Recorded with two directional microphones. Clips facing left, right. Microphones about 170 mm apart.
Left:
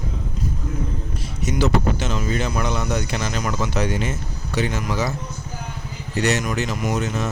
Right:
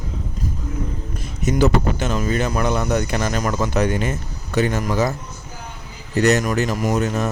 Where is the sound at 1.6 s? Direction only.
50° right (ahead or behind).